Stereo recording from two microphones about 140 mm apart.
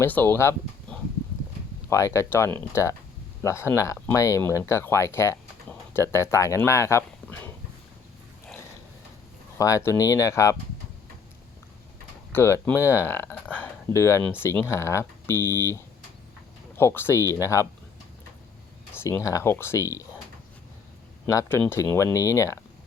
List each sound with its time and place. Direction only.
0.0 s speech: 15° left (ahead or behind)
1.9 s speech: 20° left (ahead or behind)
9.6 s speech: 25° left (ahead or behind)
12.3 s speech: 15° left (ahead or behind)
18.9 s speech: 20° left (ahead or behind)
21.2 s speech: 20° left (ahead or behind)